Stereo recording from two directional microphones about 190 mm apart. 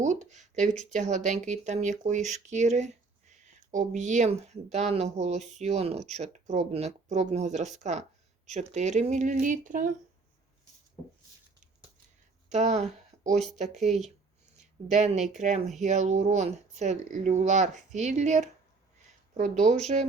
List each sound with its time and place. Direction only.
0.0 s speech: 40° right (ahead or behind)
12.5 s speech: 40° right (ahead or behind)